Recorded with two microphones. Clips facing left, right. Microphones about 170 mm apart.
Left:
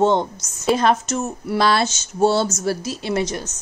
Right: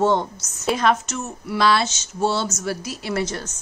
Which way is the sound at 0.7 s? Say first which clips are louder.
Left 2 dB; 35° left (ahead or behind).